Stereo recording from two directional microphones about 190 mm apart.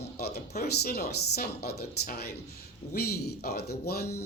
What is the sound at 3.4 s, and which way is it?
Speech, 55° left (ahead or behind).